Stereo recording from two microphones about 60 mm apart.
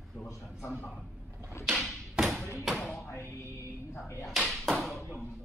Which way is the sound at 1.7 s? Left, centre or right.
Centre.